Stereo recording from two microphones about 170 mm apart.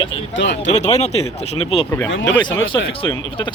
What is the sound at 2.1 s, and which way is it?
Speech, 90° left.